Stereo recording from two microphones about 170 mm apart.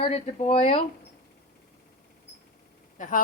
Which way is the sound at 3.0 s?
50° left (ahead or behind).